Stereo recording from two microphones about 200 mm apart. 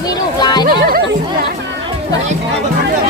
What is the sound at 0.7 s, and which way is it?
Speech, 45° right (ahead or behind).